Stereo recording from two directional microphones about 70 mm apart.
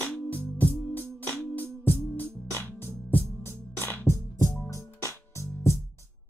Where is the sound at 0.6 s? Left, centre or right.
Left.